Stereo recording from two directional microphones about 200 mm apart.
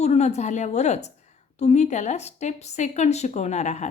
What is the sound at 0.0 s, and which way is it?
Speech, 35° left (ahead or behind).